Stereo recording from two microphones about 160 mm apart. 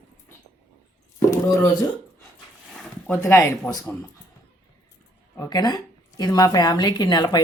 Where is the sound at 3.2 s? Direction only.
15° left (ahead or behind).